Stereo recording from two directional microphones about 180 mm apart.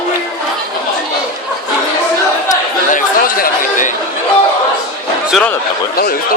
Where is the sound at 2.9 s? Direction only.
50° left (ahead or behind).